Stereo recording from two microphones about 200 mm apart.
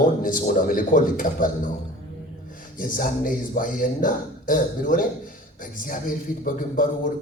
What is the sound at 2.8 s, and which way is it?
A man's voice, 45° left (ahead or behind).